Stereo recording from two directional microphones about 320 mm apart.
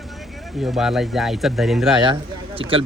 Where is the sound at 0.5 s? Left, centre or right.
Centre.